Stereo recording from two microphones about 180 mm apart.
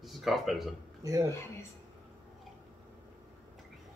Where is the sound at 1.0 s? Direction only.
20° right (ahead or behind).